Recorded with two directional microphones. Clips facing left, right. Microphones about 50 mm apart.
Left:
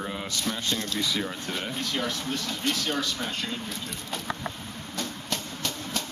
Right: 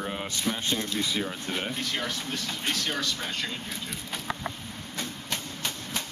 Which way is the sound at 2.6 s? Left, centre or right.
Right.